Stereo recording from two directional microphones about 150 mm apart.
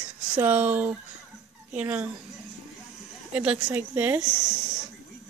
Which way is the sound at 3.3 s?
5° right (ahead or behind).